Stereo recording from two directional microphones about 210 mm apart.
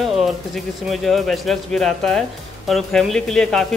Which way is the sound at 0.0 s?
Centre (ahead or behind).